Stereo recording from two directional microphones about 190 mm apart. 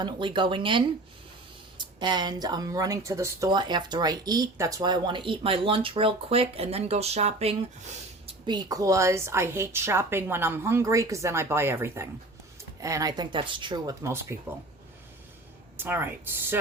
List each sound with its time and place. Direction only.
0.0 s speech: 25° right (ahead or behind)
8.4 s speech: 20° right (ahead or behind)
15.8 s speech: 10° right (ahead or behind)